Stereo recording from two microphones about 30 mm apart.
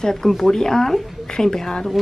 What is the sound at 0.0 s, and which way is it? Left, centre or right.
A woman's voice, centre.